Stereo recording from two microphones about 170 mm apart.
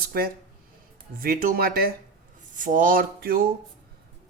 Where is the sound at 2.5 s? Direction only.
50° right (ahead or behind).